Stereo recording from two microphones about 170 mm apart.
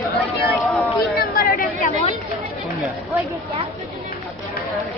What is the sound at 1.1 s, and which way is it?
Chatter, 60° left (ahead or behind).